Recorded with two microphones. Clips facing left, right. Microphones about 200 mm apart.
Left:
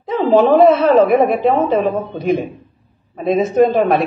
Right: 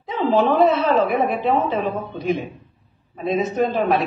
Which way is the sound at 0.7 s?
60° left (ahead or behind).